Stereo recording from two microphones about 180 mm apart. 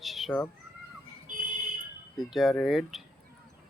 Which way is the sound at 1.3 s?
50° right (ahead or behind).